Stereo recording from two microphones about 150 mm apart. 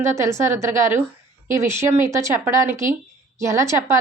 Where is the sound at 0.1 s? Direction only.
20° right (ahead or behind).